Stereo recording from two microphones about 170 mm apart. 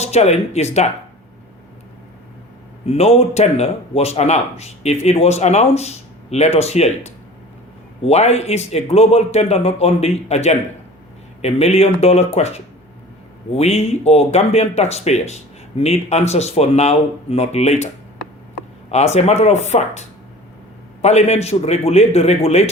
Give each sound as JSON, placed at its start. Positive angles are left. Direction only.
{"t": 0.0, "sound": "speech", "side_deg": 40}
{"t": 2.8, "sound": "speech", "side_deg": 35}
{"t": 18.9, "sound": "speech", "side_deg": 40}